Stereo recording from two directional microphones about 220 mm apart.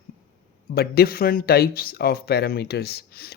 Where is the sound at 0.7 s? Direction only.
45° left (ahead or behind).